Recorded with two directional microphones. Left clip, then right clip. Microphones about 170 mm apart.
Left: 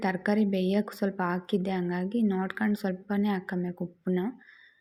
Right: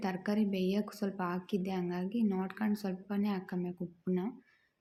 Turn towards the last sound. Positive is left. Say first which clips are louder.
# left 6 dB
turn(degrees=25)  # may be behind; listen again after turning